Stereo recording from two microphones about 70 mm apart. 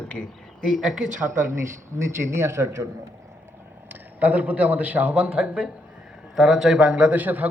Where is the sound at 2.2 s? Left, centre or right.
Right.